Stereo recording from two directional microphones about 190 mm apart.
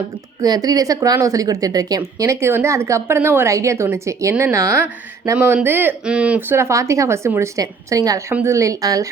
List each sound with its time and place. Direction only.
0.4 s a woman's voice: 20° right (ahead or behind)